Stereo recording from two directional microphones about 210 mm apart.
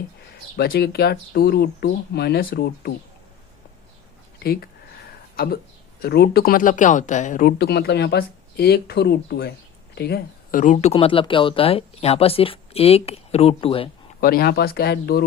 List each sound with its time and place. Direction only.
0.5 s speech: 50° left (ahead or behind)
5.4 s speech: 45° left (ahead or behind)
10.6 s speech: 35° left (ahead or behind)
14.2 s speech: 45° left (ahead or behind)